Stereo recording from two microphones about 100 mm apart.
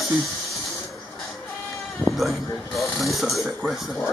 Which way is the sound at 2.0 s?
Centre (ahead or behind).